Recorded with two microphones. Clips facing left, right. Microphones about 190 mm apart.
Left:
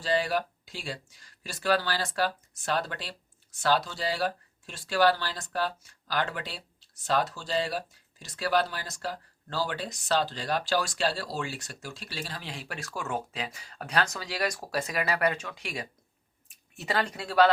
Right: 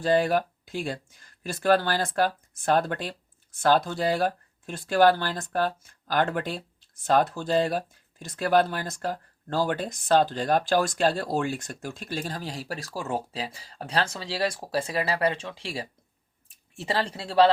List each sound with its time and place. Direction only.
0.0 s speech: 50° right (ahead or behind); by 17.5 s 30° right (ahead or behind)